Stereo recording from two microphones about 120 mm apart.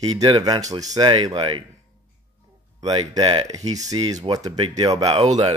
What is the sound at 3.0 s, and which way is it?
Speech, 45° right (ahead or behind).